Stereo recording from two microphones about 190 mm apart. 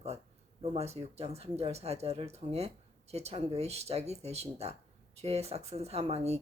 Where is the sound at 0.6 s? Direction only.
35° right (ahead or behind).